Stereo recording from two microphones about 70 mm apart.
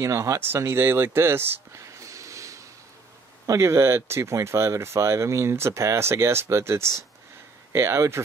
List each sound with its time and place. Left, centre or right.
0.0 s speech: right
0.4 s speech: right
1.7 s snort: right
3.4 s speech: right